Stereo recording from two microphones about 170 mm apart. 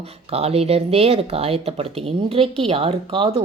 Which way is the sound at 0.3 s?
35° right (ahead or behind).